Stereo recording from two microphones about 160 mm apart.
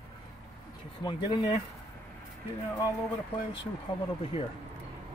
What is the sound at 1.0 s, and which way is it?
Speech, 25° left (ahead or behind).